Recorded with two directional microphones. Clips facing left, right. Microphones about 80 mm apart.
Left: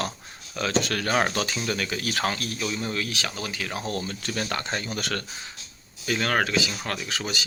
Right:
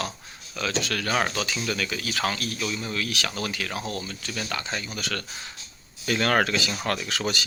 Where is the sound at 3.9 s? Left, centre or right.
Left.